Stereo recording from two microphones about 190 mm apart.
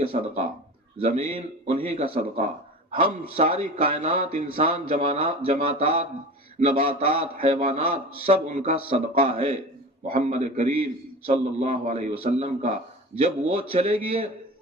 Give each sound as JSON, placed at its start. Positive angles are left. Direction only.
{"t": 0.1, "sound": "a man's voice", "side_deg": -40}